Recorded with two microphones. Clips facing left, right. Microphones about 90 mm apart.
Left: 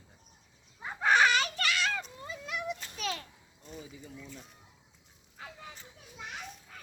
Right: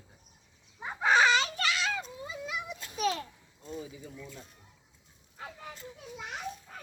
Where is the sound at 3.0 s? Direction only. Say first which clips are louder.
Right 10 dB; 20° right (ahead or behind).